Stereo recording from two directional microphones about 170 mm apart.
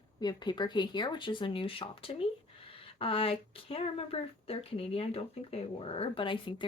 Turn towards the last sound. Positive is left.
turn(degrees=30)  # may be behind; listen again after turning